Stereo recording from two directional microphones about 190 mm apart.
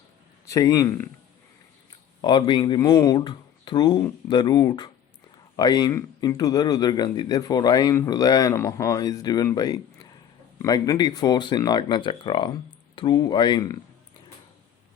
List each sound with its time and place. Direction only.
0.4 s speech: 20° left (ahead or behind)
2.2 s speech: 25° left (ahead or behind)